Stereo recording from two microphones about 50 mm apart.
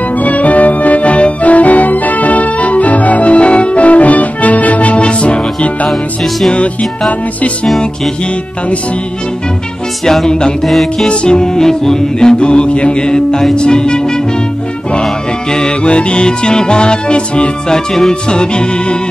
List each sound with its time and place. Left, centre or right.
0.2 s music: left
10.0 s music: centre
10.6 s music: centre
11.1 s music: centre
15.5 s music: centre